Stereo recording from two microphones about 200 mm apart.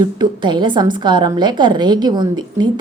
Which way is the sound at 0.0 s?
20° right (ahead or behind).